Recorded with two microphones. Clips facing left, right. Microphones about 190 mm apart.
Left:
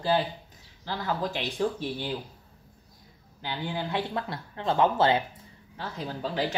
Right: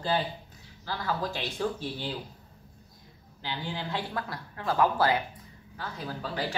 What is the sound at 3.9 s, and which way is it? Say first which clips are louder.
Speech: left 3 dB; 25° left (ahead or behind).